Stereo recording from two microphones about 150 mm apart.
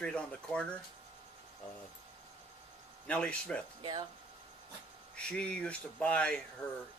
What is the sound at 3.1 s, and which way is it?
Speech, 5° left (ahead or behind).